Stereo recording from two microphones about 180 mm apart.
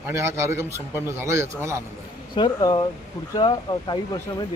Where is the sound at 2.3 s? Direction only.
25° left (ahead or behind).